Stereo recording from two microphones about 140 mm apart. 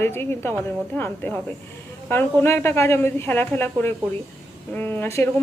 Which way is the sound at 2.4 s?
15° left (ahead or behind).